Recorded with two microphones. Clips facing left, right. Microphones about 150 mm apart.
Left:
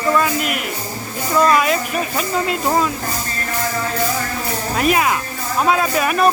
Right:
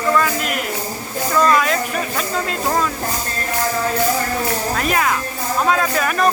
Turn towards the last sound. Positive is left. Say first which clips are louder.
# left 1 dB
turn(degrees=15)  # may be behind; listen again after turning